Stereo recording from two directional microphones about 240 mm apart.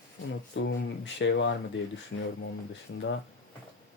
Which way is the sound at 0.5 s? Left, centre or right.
Left.